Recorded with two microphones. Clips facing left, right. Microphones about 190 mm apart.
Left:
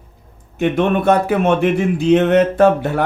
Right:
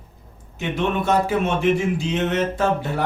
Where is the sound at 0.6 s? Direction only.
55° left (ahead or behind).